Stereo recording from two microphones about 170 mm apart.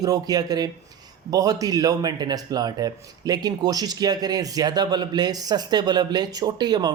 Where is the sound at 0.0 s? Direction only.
20° right (ahead or behind).